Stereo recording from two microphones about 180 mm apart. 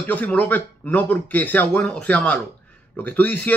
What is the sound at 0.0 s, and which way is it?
Speech, 10° left (ahead or behind).